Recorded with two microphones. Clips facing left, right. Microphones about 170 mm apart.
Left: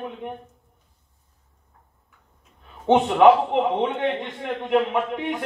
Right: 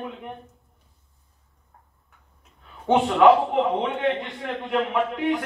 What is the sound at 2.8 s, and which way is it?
A man's voice, 20° left (ahead or behind).